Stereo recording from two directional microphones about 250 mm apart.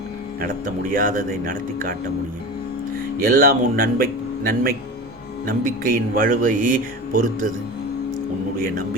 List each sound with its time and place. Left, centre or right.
0.3 s speech: right
3.2 s speech: right